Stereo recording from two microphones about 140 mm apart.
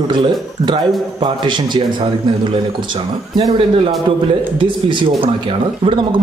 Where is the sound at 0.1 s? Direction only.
35° right (ahead or behind).